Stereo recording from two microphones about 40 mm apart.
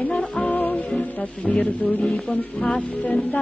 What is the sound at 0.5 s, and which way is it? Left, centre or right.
Music, left.